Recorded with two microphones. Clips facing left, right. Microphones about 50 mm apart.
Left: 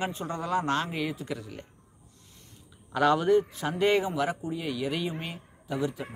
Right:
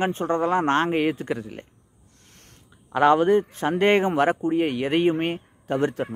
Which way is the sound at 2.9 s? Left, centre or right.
Right.